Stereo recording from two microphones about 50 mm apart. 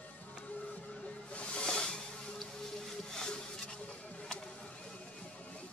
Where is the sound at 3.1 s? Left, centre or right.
Centre.